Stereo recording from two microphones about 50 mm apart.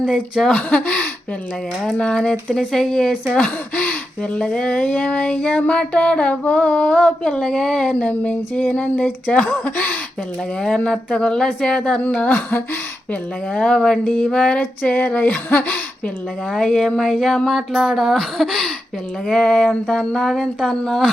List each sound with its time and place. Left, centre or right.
0.4 s speech: centre
0.8 s a sound: left
2.0 s speech: centre
3.3 s a sound: left
9.3 s speech: left
11.1 s speech: centre
12.1 s a sound: left
13.5 s speech: centre
14.6 s a sound: left
15.4 s a woman's voice: left
16.5 s speech: centre
17.7 s speech: centre
19.3 s speech: centre